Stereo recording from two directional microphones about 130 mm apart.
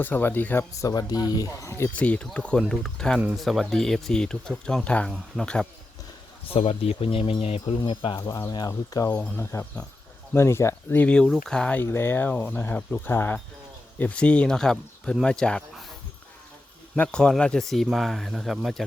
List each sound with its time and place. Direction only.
0.0 s speech: 15° left (ahead or behind)
0.9 s speech: 30° left (ahead or behind); by 5.6 s 5° left (ahead or behind)
6.5 s speech: 45° left (ahead or behind)
8.2 s speech: 20° left (ahead or behind)
9.1 s speech: 15° left (ahead or behind)
16.9 s speech: 5° left (ahead or behind)